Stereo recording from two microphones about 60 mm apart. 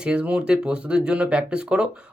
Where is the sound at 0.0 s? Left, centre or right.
Centre.